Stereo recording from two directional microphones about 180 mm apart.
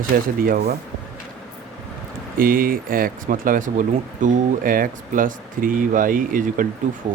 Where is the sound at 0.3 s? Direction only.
55° right (ahead or behind).